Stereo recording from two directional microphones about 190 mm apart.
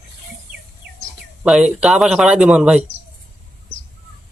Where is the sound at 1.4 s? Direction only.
5° right (ahead or behind).